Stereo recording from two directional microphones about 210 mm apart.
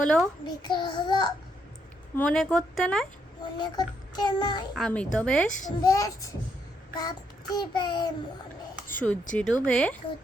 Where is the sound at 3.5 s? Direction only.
20° left (ahead or behind).